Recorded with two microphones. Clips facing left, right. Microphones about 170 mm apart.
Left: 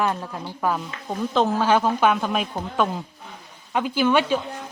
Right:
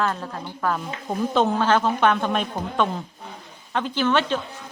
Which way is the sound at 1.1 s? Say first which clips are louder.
Right 1 dB; centre (ahead or behind).